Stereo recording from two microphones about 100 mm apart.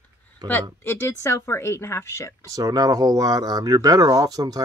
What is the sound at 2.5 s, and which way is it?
Speech, 40° right (ahead or behind).